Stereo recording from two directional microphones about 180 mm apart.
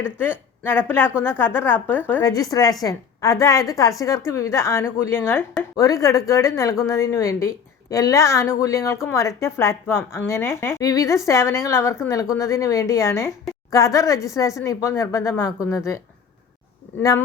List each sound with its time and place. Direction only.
0.2 s a woman's voice: 10° left (ahead or behind)
17.0 s a woman's voice: 15° left (ahead or behind)